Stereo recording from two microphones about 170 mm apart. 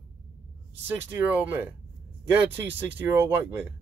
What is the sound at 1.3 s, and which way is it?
Speech, 10° right (ahead or behind).